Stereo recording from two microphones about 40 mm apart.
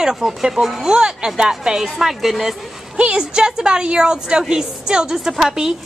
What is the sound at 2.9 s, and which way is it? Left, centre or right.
A woman's voice, right.